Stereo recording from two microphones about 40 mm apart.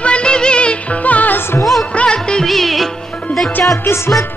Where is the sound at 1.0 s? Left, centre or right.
Left.